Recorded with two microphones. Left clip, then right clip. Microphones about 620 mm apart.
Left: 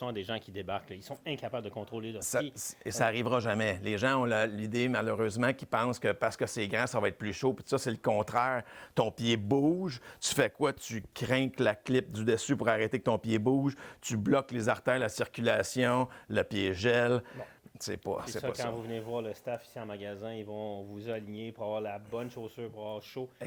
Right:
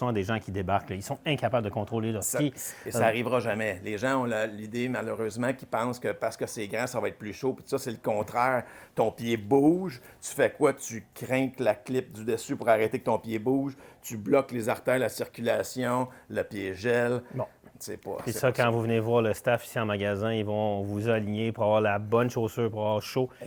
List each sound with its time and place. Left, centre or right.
0.0 s speech: centre
2.3 s a man's voice: left
18.3 s speech: right